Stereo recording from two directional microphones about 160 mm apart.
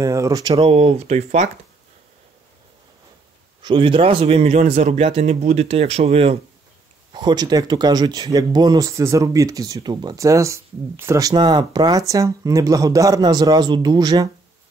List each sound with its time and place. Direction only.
0.0 s a man's voice: 20° right (ahead or behind); by 1.5 s 45° right (ahead or behind)
3.6 s a man's voice: 30° right (ahead or behind)
7.1 s speech: 30° right (ahead or behind)